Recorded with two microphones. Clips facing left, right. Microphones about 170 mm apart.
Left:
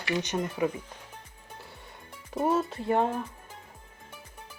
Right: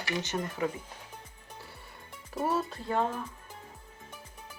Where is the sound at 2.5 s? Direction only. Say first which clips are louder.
Left 5 dB; 20° left (ahead or behind).